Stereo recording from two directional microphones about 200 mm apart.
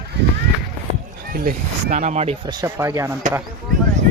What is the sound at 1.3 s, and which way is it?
Speech, 45° right (ahead or behind).